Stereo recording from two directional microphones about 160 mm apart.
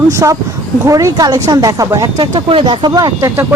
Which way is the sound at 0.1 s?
20° right (ahead or behind).